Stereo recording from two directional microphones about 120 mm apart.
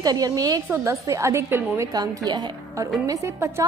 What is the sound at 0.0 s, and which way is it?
A woman's voice, 30° right (ahead or behind).